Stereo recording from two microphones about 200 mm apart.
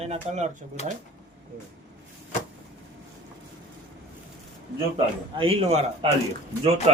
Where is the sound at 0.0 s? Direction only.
35° right (ahead or behind).